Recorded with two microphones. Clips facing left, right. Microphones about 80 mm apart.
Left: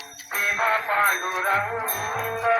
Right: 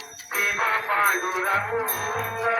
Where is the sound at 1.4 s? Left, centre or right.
Left.